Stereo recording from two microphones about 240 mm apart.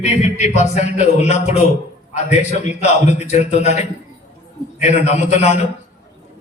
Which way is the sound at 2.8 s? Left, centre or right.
Left.